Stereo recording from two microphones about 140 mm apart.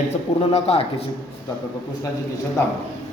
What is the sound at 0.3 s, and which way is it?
Speech, 45° left (ahead or behind).